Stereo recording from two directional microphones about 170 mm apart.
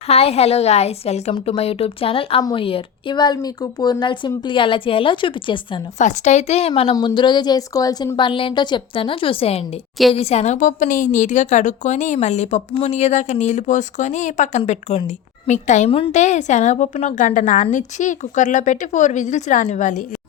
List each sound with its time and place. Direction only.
0.1 s a woman's voice: 35° left (ahead or behind)
6.0 s a woman's voice: 45° left (ahead or behind)